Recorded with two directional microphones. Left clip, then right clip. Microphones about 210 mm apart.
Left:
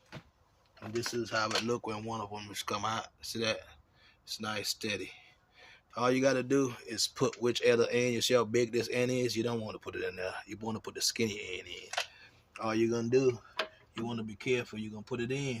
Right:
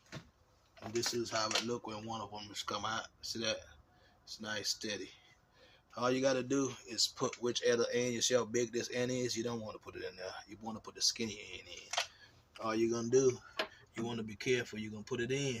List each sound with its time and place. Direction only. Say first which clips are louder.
0.8 s a sound: left 1 dB; 30° left (ahead or behind)
1.2 s speech: left 6 dB; 35° left (ahead or behind)
1.6 s speech: left 6 dB; 55° left (ahead or behind)
14.0 s speech: left 1 dB; 20° left (ahead or behind)